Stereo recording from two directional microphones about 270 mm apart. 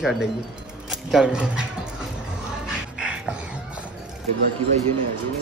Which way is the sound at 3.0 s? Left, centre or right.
Centre.